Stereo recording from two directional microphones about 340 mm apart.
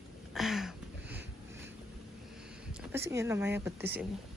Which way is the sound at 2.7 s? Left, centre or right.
Centre.